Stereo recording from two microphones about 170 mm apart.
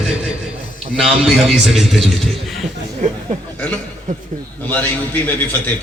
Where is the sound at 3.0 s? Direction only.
45° right (ahead or behind).